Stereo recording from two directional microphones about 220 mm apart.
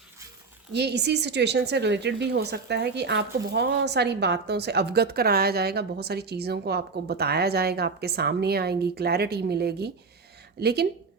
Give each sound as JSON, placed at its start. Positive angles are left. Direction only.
{"t": 0.7, "sound": "speech", "side_deg": -50}